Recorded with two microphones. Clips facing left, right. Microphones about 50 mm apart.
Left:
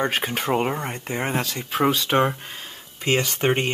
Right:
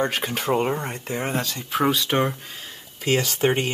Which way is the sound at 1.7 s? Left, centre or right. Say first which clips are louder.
Even; centre.